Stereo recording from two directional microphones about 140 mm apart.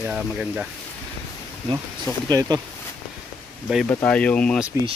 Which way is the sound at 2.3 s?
25° right (ahead or behind).